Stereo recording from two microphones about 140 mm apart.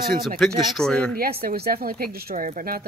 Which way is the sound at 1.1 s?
90° right.